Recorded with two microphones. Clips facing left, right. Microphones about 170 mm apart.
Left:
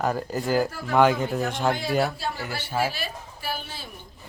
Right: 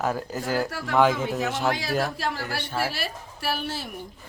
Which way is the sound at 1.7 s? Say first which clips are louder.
Left 2 dB; 90° right.